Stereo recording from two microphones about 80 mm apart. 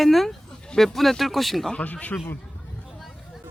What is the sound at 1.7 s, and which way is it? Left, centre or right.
Speech, centre.